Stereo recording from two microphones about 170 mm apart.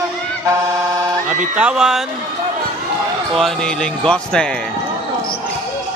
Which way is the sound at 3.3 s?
5° left (ahead or behind).